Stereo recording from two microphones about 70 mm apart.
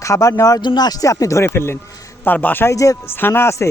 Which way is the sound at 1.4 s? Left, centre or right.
Left.